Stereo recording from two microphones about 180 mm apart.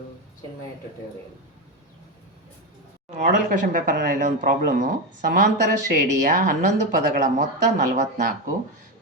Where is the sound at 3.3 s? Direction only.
45° right (ahead or behind).